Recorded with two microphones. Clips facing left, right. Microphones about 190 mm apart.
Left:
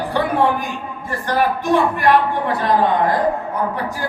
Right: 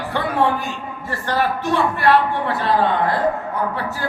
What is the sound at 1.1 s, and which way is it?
A man's voice, 15° left (ahead or behind).